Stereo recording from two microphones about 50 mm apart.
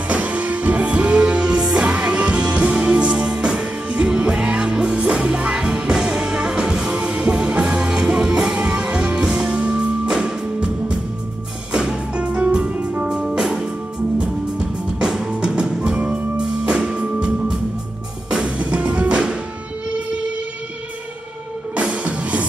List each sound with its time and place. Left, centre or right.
0.1 s music: right
7.0 s music: right
18.6 s music: right
21.7 s music: right